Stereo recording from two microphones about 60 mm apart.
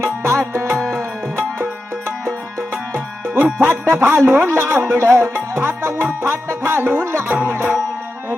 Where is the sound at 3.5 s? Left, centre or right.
Right.